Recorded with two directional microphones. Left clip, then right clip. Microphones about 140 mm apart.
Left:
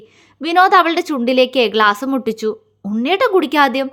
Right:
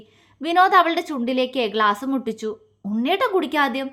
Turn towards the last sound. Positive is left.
turn(degrees=40)  # may be behind; listen again after turning